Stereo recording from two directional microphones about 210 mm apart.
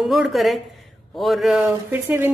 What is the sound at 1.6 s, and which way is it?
Speech, 10° right (ahead or behind).